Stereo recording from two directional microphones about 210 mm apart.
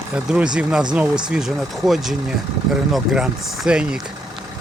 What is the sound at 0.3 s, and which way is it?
Speech, 5° right (ahead or behind).